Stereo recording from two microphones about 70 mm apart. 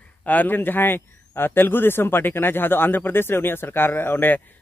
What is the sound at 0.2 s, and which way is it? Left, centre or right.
A man's voice, left.